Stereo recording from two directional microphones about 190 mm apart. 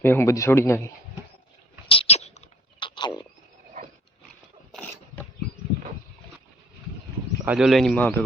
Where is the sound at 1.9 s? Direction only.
30° left (ahead or behind).